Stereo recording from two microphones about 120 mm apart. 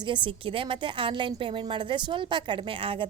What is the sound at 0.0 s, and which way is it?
A woman's voice, 40° right (ahead or behind).